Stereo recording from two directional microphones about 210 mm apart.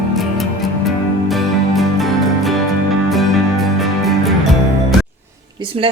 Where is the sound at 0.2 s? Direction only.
Centre (ahead or behind).